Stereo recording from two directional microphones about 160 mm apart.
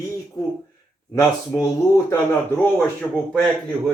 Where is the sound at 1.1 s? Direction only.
25° left (ahead or behind).